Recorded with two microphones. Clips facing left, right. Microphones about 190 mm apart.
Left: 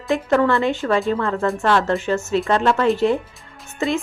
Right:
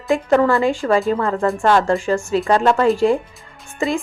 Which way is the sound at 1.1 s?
15° right (ahead or behind).